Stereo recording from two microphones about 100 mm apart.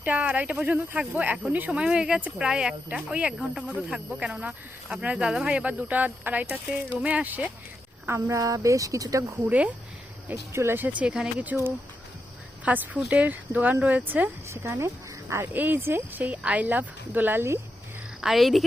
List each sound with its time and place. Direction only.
0.0 s speech: 15° right (ahead or behind)
8.0 s speech: 30° right (ahead or behind)
9.5 s speech: 15° right (ahead or behind)
10.2 s speech: 25° right (ahead or behind)
12.6 s speech: 15° right (ahead or behind)
14.4 s speech: 25° right (ahead or behind)
18.2 s a woman's voice: centre (ahead or behind)